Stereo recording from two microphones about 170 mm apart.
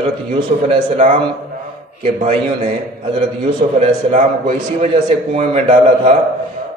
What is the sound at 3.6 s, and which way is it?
A man's voice, 45° right (ahead or behind).